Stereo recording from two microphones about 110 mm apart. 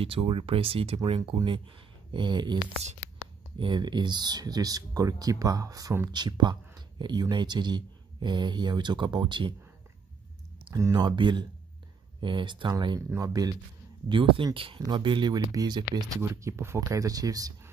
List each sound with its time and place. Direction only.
0.0 s speech: 55° right (ahead or behind)
10.7 s speech: 30° right (ahead or behind)
11.1 s speech: 45° right (ahead or behind)
14.0 s speech: 50° right (ahead or behind)
16.2 s speech: 25° right (ahead or behind)